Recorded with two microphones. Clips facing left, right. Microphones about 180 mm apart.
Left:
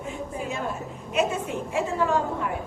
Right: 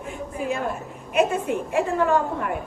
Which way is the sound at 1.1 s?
55° right (ahead or behind).